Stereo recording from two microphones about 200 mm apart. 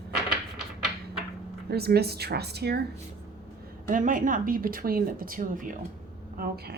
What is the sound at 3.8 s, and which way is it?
A woman's voice, 40° right (ahead or behind).